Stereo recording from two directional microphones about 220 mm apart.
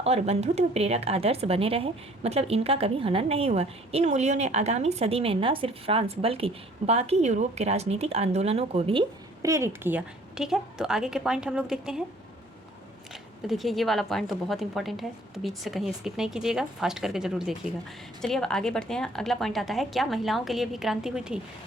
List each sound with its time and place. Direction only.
0.0 s speech: 30° right (ahead or behind); by 12.0 s 5° right (ahead or behind)
13.5 s a woman's voice: centre (ahead or behind)